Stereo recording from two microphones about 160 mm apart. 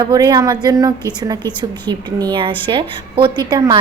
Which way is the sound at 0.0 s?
25° right (ahead or behind).